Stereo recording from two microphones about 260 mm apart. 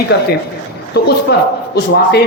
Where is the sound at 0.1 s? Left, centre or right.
Left.